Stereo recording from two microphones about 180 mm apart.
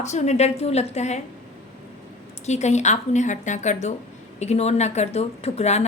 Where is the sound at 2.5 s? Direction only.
40° left (ahead or behind).